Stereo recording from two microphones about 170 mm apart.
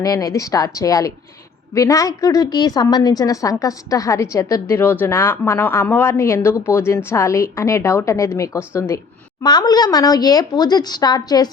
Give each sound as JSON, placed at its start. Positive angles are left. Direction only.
{"t": 0.0, "sound": "a woman's voice", "side_deg": 20}